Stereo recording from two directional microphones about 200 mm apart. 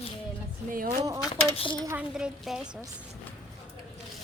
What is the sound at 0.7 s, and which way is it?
Speech, 45° right (ahead or behind).